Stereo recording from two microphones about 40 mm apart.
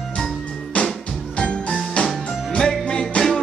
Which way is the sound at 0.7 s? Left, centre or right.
Left.